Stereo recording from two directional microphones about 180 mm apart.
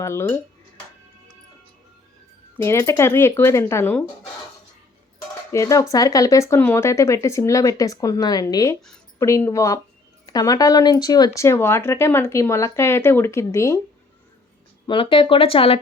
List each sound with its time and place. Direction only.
0.0 s speech: 15° left (ahead or behind)
2.6 s speech: 15° left (ahead or behind)
5.5 s cutlery: 20° left (ahead or behind)
5.9 s speech: 20° left (ahead or behind)
14.8 s speech: 30° left (ahead or behind)